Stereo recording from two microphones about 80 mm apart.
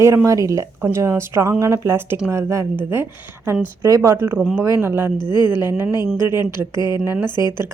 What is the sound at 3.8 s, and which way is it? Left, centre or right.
Speech, right.